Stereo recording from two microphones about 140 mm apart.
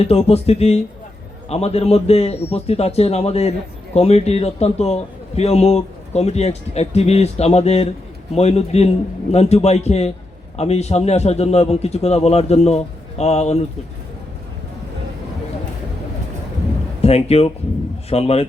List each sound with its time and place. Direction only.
0.0 s a man's voice: 45° left (ahead or behind)
17.0 s a man's voice: 45° left (ahead or behind)